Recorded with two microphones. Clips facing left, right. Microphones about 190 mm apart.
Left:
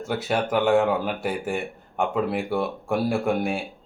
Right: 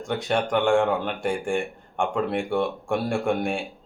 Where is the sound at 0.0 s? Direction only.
5° left (ahead or behind).